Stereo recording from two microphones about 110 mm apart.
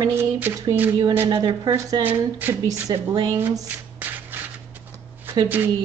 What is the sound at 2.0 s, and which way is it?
Speech, 15° right (ahead or behind).